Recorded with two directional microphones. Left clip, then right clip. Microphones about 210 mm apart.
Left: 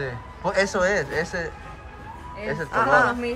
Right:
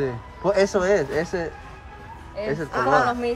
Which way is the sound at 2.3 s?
45° right (ahead or behind).